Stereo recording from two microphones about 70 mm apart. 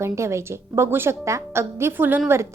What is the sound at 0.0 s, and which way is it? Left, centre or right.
A woman's voice, right.